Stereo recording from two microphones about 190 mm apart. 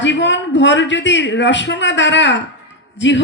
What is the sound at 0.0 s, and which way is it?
A man's voice, 70° left (ahead or behind).